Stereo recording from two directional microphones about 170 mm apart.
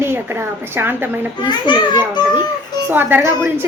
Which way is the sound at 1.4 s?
25° left (ahead or behind).